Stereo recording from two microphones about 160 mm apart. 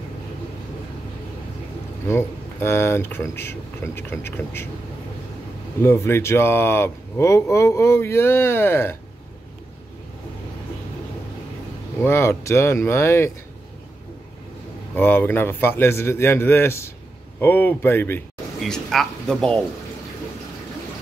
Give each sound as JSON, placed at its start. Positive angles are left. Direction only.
{"t": 2.0, "sound": "speech", "side_deg": 15}
{"t": 5.8, "sound": "speech", "side_deg": 15}
{"t": 12.0, "sound": "speech", "side_deg": 15}
{"t": 15.0, "sound": "speech", "side_deg": 10}
{"t": 18.6, "sound": "speech", "side_deg": 0}